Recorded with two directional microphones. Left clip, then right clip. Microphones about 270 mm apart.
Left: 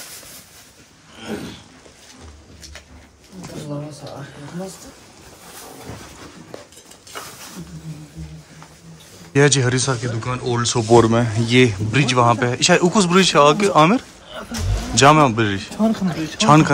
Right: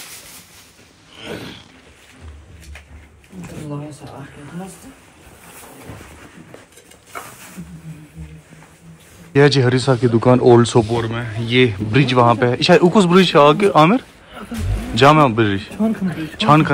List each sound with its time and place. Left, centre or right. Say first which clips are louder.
9.3 s speech: right 3 dB; centre
9.9 s speech: right 12 dB; centre
10.9 s speech: left 9 dB; left
15.8 s speech: left 3 dB; left
16.3 s speech: even; centre